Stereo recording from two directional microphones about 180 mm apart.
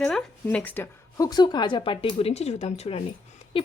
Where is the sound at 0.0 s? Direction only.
5° left (ahead or behind).